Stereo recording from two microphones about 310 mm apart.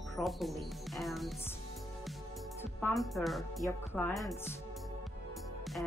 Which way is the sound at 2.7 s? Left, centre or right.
Centre.